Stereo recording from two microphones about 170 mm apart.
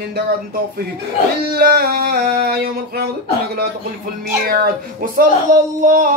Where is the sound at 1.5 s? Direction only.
60° right (ahead or behind).